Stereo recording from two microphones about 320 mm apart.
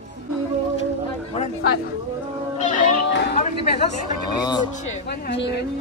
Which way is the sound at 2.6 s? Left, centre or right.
Left.